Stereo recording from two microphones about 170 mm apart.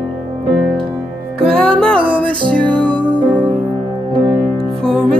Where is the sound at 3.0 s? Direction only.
25° right (ahead or behind).